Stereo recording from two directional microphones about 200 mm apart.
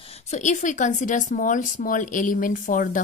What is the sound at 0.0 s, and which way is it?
A woman's voice, 35° left (ahead or behind).